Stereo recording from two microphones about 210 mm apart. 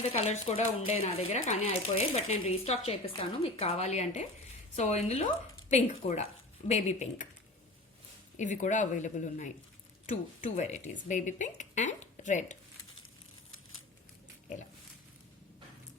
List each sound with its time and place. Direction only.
0.0 s speech: 30° left (ahead or behind)
8.4 s speech: 35° left (ahead or behind)